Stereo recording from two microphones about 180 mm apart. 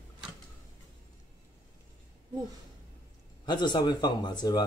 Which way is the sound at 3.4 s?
25° left (ahead or behind).